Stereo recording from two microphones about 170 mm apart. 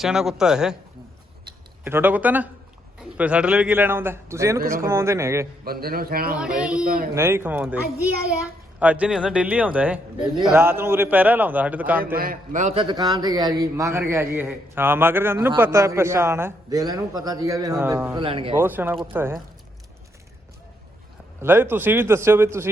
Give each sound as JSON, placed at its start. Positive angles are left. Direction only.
{"t": 0.0, "sound": "speech", "side_deg": -5}
{"t": 1.8, "sound": "a man's voice", "side_deg": -15}
{"t": 4.6, "sound": "a man's voice", "side_deg": -55}
{"t": 4.9, "sound": "a man's voice", "side_deg": -15}
{"t": 5.6, "sound": "a man's voice", "side_deg": -60}
{"t": 6.6, "sound": "a man's voice", "side_deg": -5}
{"t": 6.8, "sound": "a man's voice", "side_deg": -55}
{"t": 7.1, "sound": "a man's voice", "side_deg": -15}
{"t": 8.8, "sound": "a man's voice", "side_deg": -10}
{"t": 12.1, "sound": "a man's voice", "side_deg": -60}
{"t": 12.7, "sound": "a man's voice", "side_deg": -30}
{"t": 18.2, "sound": "speech", "side_deg": -30}
{"t": 18.5, "sound": "a man's voice", "side_deg": -10}
{"t": 21.4, "sound": "a man's voice", "side_deg": -10}